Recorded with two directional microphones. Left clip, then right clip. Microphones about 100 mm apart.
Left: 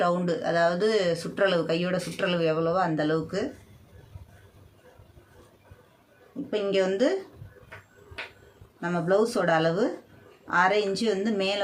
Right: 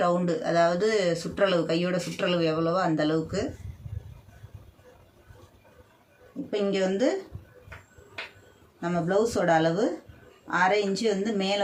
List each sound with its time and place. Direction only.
0.0 s speech: 25° left (ahead or behind)
6.5 s speech: 45° left (ahead or behind)
8.8 s speech: 40° left (ahead or behind)